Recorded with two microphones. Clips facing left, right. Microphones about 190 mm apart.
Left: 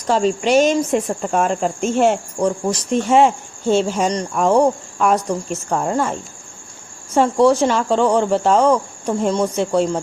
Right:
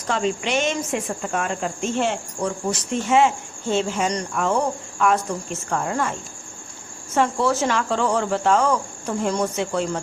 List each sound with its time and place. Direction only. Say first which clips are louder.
0.1 s speech: left 7 dB; 40° left (ahead or behind)